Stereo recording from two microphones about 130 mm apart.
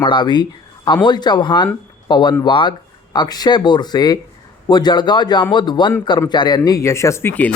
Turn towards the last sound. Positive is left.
turn(degrees=10)  # may be behind; listen again after turning